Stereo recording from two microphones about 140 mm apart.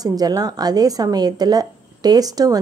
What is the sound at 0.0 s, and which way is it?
A woman's voice, 25° right (ahead or behind).